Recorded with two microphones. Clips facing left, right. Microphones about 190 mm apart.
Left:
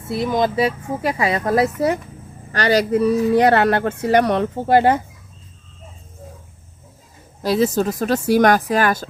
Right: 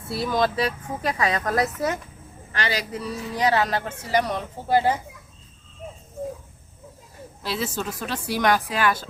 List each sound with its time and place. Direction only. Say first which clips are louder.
0.1 s speech: left 4 dB; 20° left (ahead or behind)
2.5 s speech: left 11 dB; 40° left (ahead or behind); by 5.0 s 65° left (ahead or behind)
7.4 s speech: left 11 dB; 40° left (ahead or behind)